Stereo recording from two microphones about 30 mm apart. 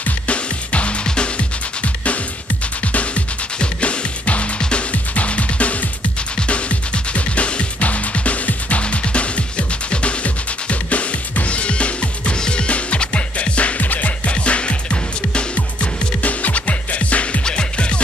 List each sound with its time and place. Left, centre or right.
0.3 s music: left
1.0 s music: left
2.9 s music: left
4.6 s music: left
5.1 s music: left
12.4 s music: left
12.6 s music: left
13.7 s music: left
14.3 s music: left
17.5 s music: left